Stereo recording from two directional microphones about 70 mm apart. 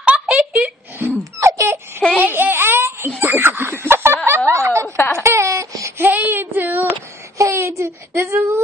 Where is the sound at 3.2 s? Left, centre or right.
Right.